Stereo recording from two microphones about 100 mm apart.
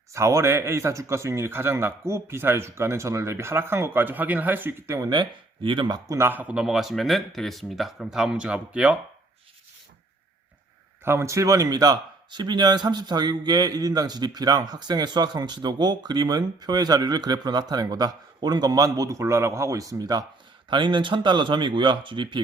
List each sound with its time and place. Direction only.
0.1 s speech: 30° right (ahead or behind)
4.9 s speech: 45° right (ahead or behind)
6.1 s speech: 25° right (ahead or behind)
11.0 s speech: 25° right (ahead or behind)
20.7 s speech: 50° right (ahead or behind)